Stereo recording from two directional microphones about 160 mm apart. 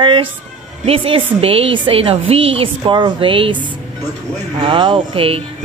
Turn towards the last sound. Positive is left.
turn(degrees=-35)  # may be behind; listen again after turning